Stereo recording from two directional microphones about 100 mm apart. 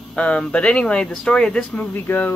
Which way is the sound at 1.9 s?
20° left (ahead or behind).